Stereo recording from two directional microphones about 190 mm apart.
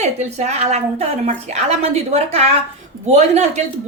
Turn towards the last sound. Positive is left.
turn(degrees=-35)  # may be behind; listen again after turning